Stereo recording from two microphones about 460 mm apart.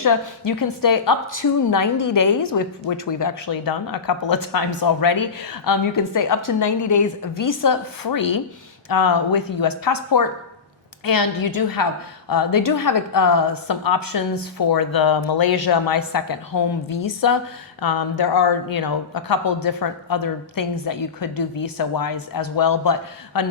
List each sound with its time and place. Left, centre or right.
0.0 s a woman's voice: left